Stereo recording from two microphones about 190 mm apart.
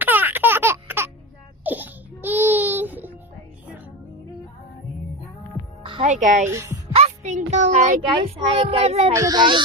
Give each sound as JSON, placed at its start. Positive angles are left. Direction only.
{"t": 0.0, "sound": "baby laughter", "side_deg": -10}
{"t": 1.6, "sound": "crying", "side_deg": -10}
{"t": 5.8, "sound": "music", "side_deg": -30}
{"t": 6.1, "sound": "a child's voice", "side_deg": -40}
{"t": 6.4, "sound": "a woman's voice", "side_deg": -15}
{"t": 6.9, "sound": "a child's voice", "side_deg": -35}
{"t": 9.1, "sound": "speech", "side_deg": -20}